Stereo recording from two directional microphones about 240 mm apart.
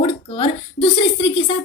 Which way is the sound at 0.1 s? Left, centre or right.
Left.